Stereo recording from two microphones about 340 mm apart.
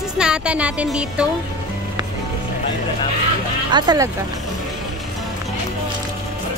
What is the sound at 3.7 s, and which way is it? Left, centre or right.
Speech, centre.